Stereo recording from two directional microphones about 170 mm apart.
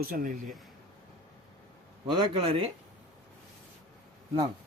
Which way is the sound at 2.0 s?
30° right (ahead or behind).